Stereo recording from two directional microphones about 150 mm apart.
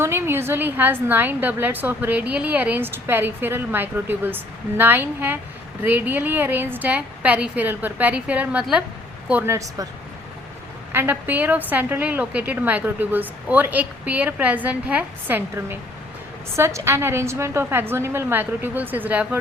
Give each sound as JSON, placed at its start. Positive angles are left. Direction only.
{"t": 0.0, "sound": "a woman's voice", "side_deg": -15}
{"t": 10.9, "sound": "a woman's voice", "side_deg": -15}